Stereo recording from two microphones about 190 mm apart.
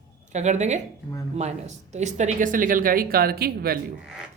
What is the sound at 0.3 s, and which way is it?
Speech, 35° right (ahead or behind).